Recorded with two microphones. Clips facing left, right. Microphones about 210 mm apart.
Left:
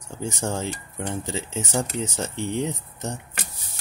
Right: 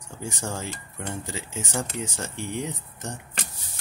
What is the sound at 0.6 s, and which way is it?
Speech, 25° left (ahead or behind).